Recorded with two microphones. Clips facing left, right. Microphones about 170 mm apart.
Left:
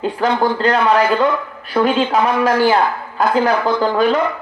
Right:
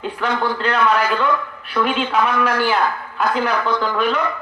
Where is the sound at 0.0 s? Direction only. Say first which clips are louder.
Left 5 dB; 35° left (ahead or behind).